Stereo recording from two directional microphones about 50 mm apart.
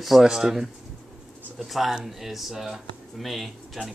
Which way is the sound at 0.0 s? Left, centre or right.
Centre.